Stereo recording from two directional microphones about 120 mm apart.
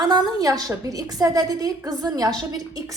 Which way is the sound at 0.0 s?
35° right (ahead or behind).